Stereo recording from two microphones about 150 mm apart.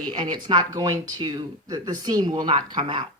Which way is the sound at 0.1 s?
30° right (ahead or behind).